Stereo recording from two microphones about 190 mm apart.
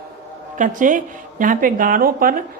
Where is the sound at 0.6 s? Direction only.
45° right (ahead or behind).